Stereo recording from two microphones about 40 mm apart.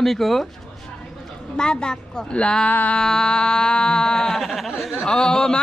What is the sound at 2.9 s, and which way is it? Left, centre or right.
A man's voice, centre.